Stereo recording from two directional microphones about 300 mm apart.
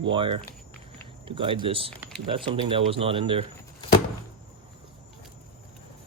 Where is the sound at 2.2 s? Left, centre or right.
Centre.